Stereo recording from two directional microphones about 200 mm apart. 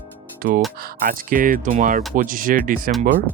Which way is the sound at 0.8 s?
45° right (ahead or behind).